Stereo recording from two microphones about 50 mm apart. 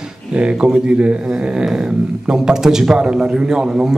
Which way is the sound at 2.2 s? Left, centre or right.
Centre.